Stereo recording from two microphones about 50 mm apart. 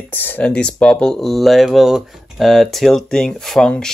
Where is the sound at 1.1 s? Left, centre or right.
Centre.